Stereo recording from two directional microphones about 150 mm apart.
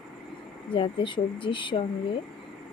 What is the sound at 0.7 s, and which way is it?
Speech, 35° left (ahead or behind).